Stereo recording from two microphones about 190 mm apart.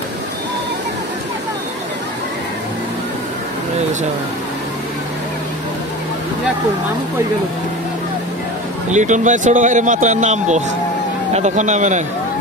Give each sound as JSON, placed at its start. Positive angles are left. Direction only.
{"t": 8.9, "sound": "speech", "side_deg": -40}